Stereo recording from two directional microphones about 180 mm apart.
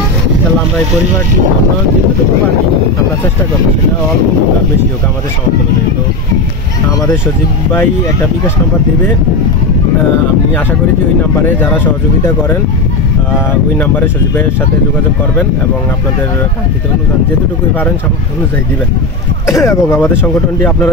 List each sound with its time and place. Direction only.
11.4 s speech: 10° left (ahead or behind)
13.7 s speech: 10° left (ahead or behind)
19.4 s speech: 15° left (ahead or behind)